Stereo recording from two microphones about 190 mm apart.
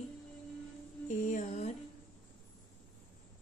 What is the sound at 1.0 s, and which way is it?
Music, 40° left (ahead or behind).